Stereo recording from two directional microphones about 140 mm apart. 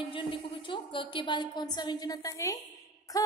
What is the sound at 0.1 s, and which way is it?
A woman's voice, 35° left (ahead or behind).